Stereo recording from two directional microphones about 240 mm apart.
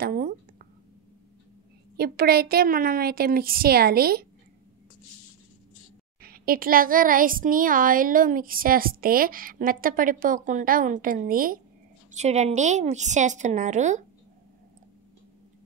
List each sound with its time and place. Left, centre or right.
0.0 s speech: right
2.0 s a child's voice: right
6.2 s a child's voice: right